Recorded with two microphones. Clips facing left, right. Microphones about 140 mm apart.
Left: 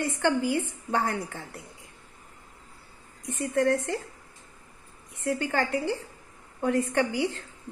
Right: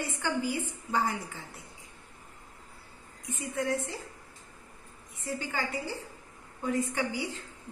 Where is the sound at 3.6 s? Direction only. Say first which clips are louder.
Left 7 dB; 70° left (ahead or behind).